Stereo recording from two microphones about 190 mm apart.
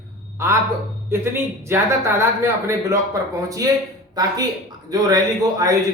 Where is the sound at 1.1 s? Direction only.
15° right (ahead or behind).